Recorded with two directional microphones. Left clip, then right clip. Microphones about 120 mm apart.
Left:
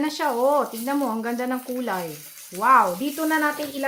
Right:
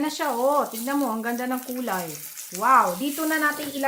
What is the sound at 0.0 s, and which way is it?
Speech, 50° left (ahead or behind).